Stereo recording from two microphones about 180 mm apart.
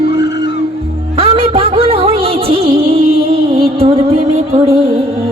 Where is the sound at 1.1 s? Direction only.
30° right (ahead or behind).